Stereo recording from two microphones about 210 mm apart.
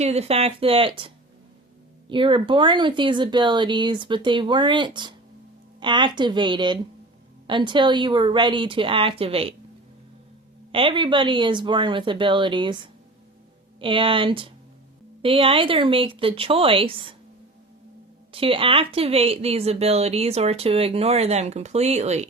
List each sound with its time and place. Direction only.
0.0 s speech: 30° right (ahead or behind)
10.7 s speech: 25° right (ahead or behind)
18.3 s speech: 25° right (ahead or behind)